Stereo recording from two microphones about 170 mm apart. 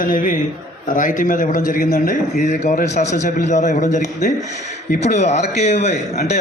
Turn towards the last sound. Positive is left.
turn(degrees=40)  # may be behind; listen again after turning